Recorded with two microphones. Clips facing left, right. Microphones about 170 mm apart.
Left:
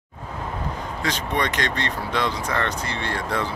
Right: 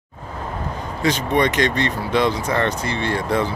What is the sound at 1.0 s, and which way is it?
Speech, 15° right (ahead or behind).